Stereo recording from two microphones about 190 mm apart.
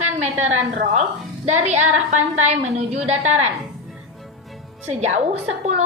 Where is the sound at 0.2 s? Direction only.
35° right (ahead or behind).